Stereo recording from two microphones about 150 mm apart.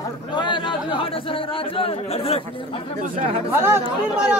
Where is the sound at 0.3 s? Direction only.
30° left (ahead or behind).